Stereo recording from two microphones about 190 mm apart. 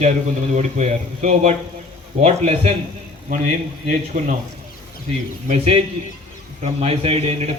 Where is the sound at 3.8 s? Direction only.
40° right (ahead or behind).